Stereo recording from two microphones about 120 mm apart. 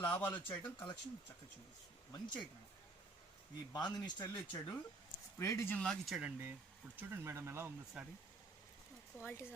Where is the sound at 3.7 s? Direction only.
35° left (ahead or behind).